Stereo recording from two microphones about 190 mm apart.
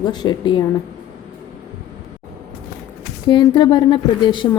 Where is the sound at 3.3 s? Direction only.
25° left (ahead or behind).